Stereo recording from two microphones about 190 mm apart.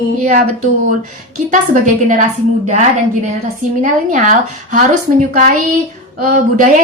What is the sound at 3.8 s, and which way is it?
A woman's voice, 40° right (ahead or behind).